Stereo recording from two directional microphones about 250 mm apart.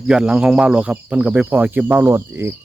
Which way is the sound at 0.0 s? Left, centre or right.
Centre.